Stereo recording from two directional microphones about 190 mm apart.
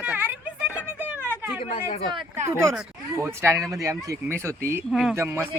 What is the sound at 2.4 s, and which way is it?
Speech, 15° right (ahead or behind).